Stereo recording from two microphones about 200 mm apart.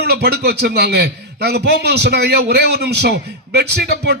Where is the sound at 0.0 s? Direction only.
55° right (ahead or behind).